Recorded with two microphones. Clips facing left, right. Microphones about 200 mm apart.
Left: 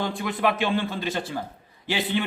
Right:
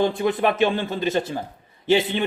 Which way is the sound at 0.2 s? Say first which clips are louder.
Right 5 dB; 20° right (ahead or behind).